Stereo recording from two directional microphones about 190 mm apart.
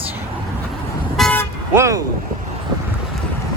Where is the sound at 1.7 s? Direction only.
15° right (ahead or behind).